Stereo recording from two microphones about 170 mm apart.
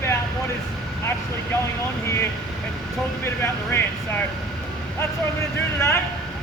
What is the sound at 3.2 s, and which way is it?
Speech, 15° left (ahead or behind).